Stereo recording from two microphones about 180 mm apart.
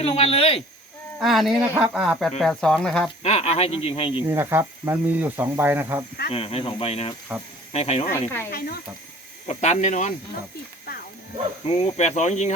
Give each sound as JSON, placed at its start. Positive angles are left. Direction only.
{"t": 0.0, "sound": "speech", "side_deg": 35}
{"t": 1.2, "sound": "speech", "side_deg": 0}
{"t": 3.2, "sound": "speech", "side_deg": 35}
{"t": 4.3, "sound": "speech", "side_deg": -15}
{"t": 6.3, "sound": "speech", "side_deg": 30}
{"t": 7.3, "sound": "speech", "side_deg": -10}
{"t": 7.7, "sound": "speech", "side_deg": 35}
{"t": 8.4, "sound": "speech", "side_deg": 60}
{"t": 9.5, "sound": "speech", "side_deg": 40}
{"t": 11.6, "sound": "speech", "side_deg": 35}